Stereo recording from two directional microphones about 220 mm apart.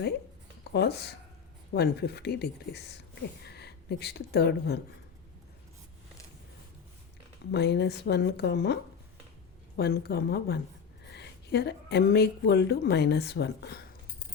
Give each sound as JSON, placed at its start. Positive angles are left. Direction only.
{"t": 0.7, "sound": "a woman's voice", "side_deg": 45}
{"t": 7.5, "sound": "a woman's voice", "side_deg": 50}